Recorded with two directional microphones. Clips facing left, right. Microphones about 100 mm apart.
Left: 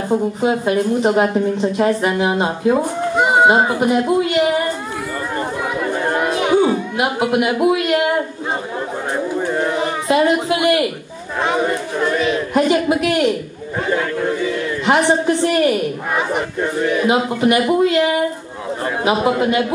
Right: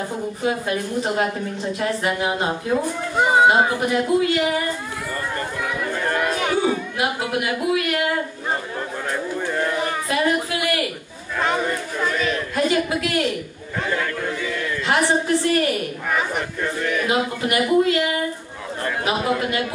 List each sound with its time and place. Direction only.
0.4 s a woman's voice: 25° left (ahead or behind)
5.3 s chatter: 25° left (ahead or behind)
9.1 s a sound: 20° left (ahead or behind)
11.4 s a woman's voice: 20° left (ahead or behind)